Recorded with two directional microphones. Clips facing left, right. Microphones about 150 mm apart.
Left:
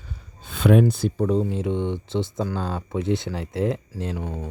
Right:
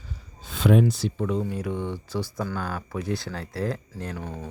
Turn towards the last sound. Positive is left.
turn(degrees=15)  # may be behind; listen again after turning